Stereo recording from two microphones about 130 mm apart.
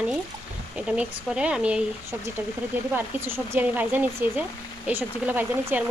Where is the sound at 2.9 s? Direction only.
15° right (ahead or behind).